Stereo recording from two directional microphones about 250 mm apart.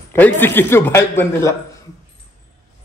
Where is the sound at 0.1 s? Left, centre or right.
Centre.